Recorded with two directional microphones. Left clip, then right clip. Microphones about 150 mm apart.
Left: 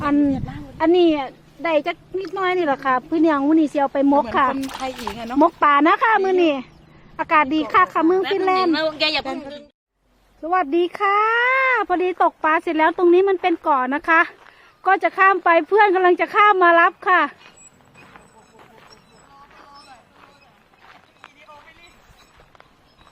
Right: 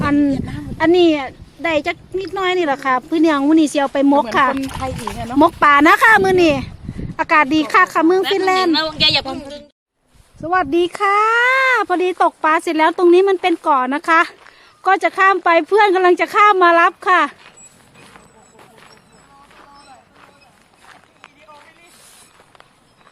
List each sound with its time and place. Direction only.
0.0 s a sound: 10° right (ahead or behind)
0.8 s speech: centre (ahead or behind)
4.8 s speech: 25° right (ahead or behind)
5.2 s speech: 10° right (ahead or behind)
8.4 s speech: 5° right (ahead or behind)
9.0 s a man's voice: 85° left
9.4 s a woman's voice: 65° left (ahead or behind)
10.4 s speech: 10° right (ahead or behind)
18.6 s a sound: centre (ahead or behind)
20.8 s run: centre (ahead or behind)